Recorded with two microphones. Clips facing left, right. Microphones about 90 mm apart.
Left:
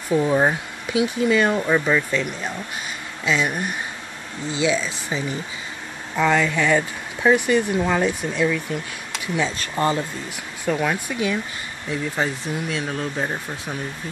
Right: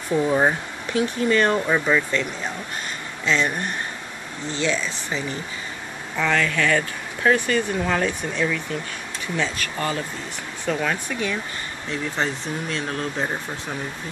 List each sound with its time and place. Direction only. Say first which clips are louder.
0.1 s speech: left 1 dB; 5° left (ahead or behind)
9.6 s speech: left 4 dB; 25° left (ahead or behind)
10.6 s speech: left 2 dB; 10° left (ahead or behind)